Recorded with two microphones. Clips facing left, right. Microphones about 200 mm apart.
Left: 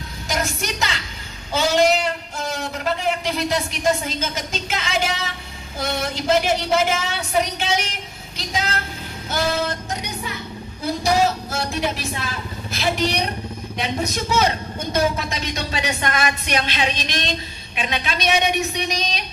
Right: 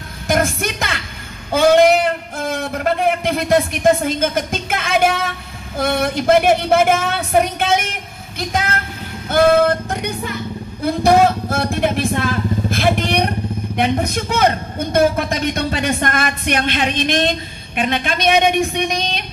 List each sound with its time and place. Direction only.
0.3 s a man's voice: 55° right (ahead or behind)